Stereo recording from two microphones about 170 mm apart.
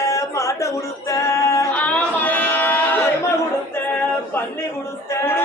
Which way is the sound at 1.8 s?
10° left (ahead or behind).